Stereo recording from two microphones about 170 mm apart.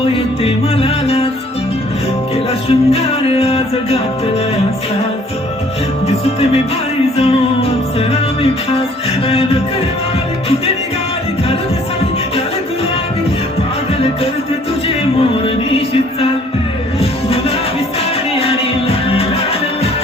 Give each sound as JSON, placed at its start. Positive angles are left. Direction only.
{"t": 0.4, "sound": "music", "side_deg": 35}
{"t": 2.3, "sound": "music", "side_deg": 35}
{"t": 6.1, "sound": "music", "side_deg": 35}
{"t": 14.8, "sound": "music", "side_deg": 35}
{"t": 17.0, "sound": "music", "side_deg": 35}